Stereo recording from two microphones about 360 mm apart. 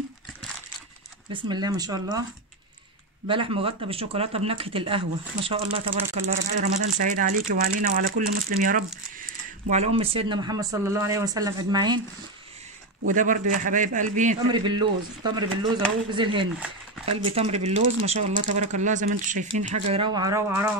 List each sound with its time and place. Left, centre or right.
1.3 s speech: centre
3.3 s a man's voice: centre
13.0 s a man's voice: right